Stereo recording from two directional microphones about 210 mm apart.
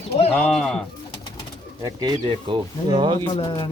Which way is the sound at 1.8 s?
20° right (ahead or behind).